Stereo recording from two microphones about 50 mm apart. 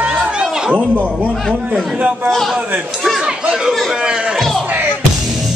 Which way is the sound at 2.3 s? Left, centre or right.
Centre.